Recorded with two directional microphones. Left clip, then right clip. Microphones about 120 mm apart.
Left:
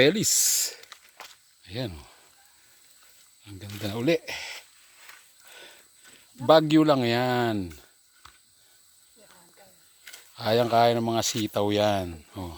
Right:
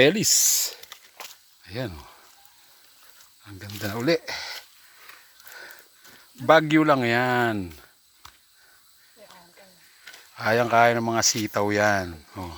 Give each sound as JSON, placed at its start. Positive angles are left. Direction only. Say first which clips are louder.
{"t": 0.0, "sound": "speech", "louder": "right 3 dB", "side_deg": 15}
{"t": 1.6, "sound": "speech", "louder": "right 2 dB", "side_deg": 15}
{"t": 3.7, "sound": "speech", "louder": "right 2 dB", "side_deg": 25}
{"t": 6.4, "sound": "speech", "louder": "right 1 dB", "side_deg": 40}
{"t": 10.3, "sound": "speech", "louder": "right 2 dB", "side_deg": 20}